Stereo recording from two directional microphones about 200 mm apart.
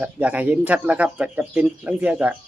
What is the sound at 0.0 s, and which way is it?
Speech, 5° right (ahead or behind).